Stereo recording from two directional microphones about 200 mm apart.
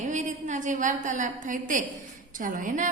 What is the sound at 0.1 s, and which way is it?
A woman's voice, 35° right (ahead or behind).